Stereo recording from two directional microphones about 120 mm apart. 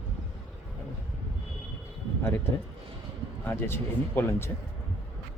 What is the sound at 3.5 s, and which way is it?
Speech, 20° left (ahead or behind).